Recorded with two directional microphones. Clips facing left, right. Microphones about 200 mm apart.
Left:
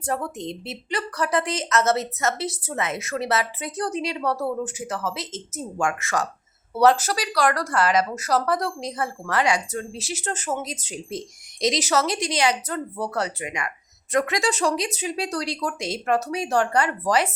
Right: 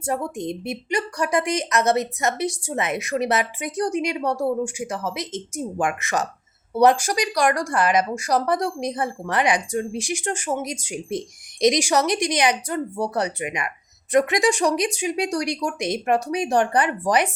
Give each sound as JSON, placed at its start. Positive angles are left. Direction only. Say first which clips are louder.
{"t": 0.0, "sound": "a woman's voice", "louder": "right 2 dB", "side_deg": -10}